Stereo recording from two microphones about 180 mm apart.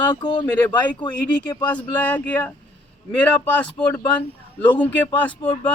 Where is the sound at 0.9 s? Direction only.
25° left (ahead or behind).